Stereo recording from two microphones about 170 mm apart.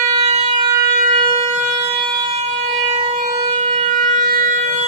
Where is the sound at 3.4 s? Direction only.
40° right (ahead or behind).